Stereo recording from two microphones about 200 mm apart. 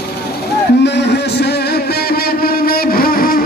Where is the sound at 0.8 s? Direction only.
60° left (ahead or behind).